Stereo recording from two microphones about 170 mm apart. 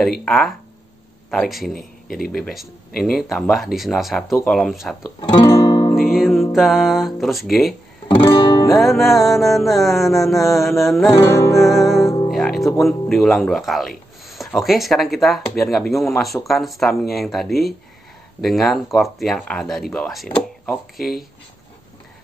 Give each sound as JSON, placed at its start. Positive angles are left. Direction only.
{"t": 0.2, "sound": "speech", "side_deg": 0}
{"t": 2.0, "sound": "speech", "side_deg": 60}
{"t": 2.3, "sound": "speech", "side_deg": 0}
{"t": 5.4, "sound": "music", "side_deg": 25}
{"t": 6.1, "sound": "music", "side_deg": 0}
{"t": 6.5, "sound": "speech", "side_deg": 0}
{"t": 8.1, "sound": "music", "side_deg": 30}
{"t": 8.6, "sound": "speech", "side_deg": 0}
{"t": 11.1, "sound": "music", "side_deg": 15}
{"t": 11.6, "sound": "speech", "side_deg": 0}
{"t": 12.3, "sound": "music", "side_deg": 0}
{"t": 12.8, "sound": "speech", "side_deg": 0}